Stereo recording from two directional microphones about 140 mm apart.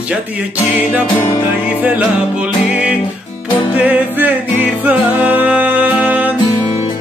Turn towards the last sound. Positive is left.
turn(degrees=-10)  # may be behind; listen again after turning